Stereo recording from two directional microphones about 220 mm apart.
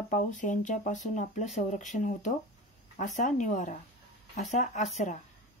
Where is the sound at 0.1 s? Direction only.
35° left (ahead or behind).